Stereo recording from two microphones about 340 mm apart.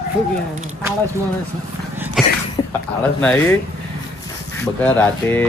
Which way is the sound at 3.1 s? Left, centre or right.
Centre.